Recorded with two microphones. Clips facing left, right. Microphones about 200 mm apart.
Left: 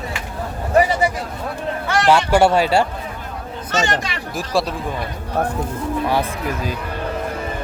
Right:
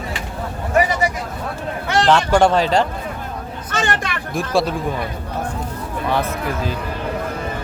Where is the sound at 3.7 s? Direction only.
55° right (ahead or behind).